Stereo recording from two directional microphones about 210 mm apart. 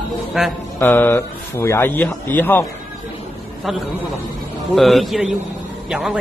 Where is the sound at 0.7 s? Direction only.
10° left (ahead or behind).